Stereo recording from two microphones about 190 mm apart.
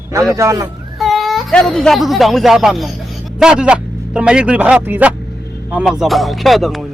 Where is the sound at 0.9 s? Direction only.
Centre (ahead or behind).